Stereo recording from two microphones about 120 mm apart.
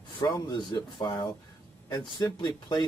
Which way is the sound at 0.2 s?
35° left (ahead or behind).